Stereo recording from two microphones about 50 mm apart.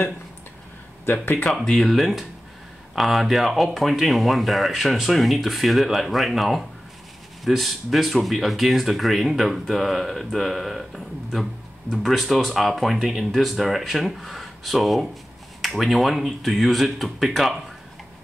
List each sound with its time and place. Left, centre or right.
1.0 s speech: left
1.7 s speech: centre